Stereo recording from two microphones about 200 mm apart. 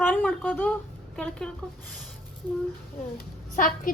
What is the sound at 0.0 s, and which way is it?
A woman's voice, 10° left (ahead or behind).